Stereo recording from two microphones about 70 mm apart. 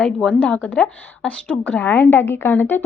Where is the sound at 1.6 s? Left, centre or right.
Left.